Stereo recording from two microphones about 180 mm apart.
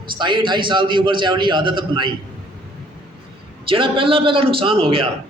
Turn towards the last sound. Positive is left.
turn(degrees=-30)  # may be behind; listen again after turning